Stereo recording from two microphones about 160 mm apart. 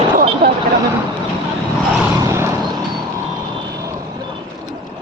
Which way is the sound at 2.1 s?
20° right (ahead or behind).